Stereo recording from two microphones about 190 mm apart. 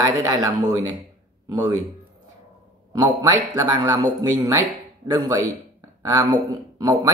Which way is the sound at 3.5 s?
20° right (ahead or behind).